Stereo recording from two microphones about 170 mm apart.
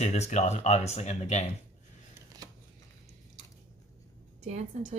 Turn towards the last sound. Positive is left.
turn(degrees=-45)  # may be behind; listen again after turning